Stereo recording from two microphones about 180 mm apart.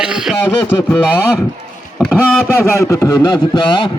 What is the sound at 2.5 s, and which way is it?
Speech, 15° left (ahead or behind).